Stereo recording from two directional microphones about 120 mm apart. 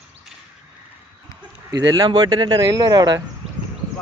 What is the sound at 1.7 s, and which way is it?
Speech, 35° right (ahead or behind).